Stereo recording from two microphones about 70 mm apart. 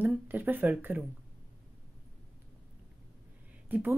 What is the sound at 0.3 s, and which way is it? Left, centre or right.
Speech, right.